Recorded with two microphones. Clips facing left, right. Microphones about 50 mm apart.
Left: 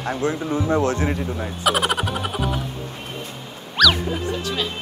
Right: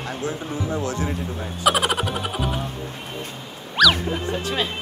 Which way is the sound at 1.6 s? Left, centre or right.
Centre.